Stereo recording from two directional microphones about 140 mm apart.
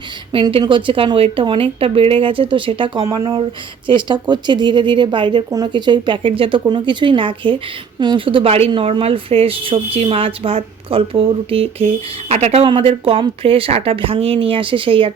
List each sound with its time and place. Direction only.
0.3 s a woman's voice: 35° right (ahead or behind)